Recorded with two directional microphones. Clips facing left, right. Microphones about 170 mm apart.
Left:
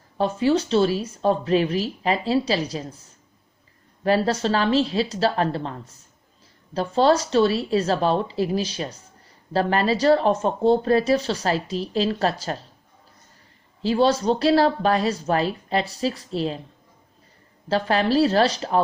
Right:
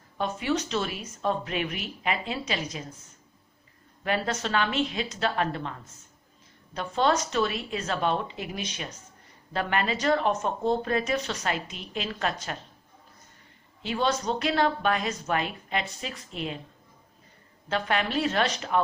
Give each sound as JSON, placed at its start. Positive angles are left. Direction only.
{"t": 0.2, "sound": "speech", "side_deg": 30}
{"t": 13.8, "sound": "speech", "side_deg": 35}
{"t": 17.7, "sound": "speech", "side_deg": 35}